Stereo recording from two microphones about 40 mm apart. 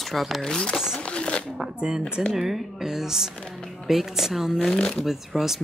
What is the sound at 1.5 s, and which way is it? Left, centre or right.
Speech, centre.